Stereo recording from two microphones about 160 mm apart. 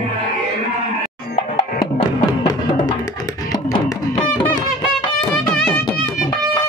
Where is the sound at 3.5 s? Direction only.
25° left (ahead or behind).